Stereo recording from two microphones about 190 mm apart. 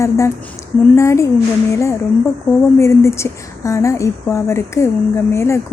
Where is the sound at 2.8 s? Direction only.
15° left (ahead or behind).